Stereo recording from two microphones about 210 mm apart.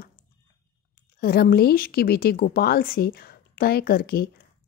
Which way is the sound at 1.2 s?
45° left (ahead or behind).